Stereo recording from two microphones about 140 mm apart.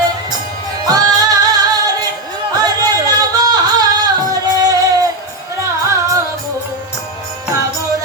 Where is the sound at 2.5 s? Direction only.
30° right (ahead or behind).